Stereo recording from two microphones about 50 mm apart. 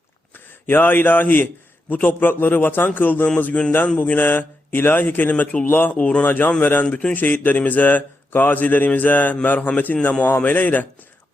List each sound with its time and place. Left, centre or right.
0.3 s a man's voice: left
3.8 s a man's voice: left
6.2 s a man's voice: left